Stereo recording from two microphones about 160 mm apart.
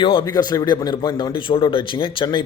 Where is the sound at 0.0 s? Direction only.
30° left (ahead or behind).